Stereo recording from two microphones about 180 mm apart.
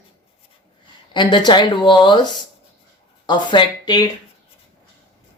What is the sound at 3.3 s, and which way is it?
Speech, 25° left (ahead or behind).